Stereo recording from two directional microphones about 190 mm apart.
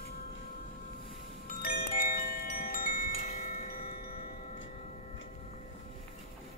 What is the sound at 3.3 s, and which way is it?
Wind chime, 45° left (ahead or behind).